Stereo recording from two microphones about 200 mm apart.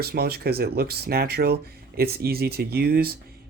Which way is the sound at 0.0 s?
50° right (ahead or behind).